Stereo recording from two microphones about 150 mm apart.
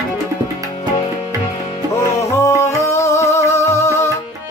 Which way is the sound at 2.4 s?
20° left (ahead or behind).